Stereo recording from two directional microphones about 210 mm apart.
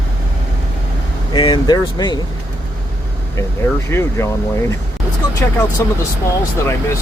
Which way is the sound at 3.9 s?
15° left (ahead or behind).